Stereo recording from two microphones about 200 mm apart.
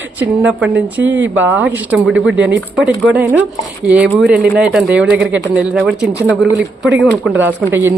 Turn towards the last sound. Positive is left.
turn(degrees=-10)  # may be behind; listen again after turning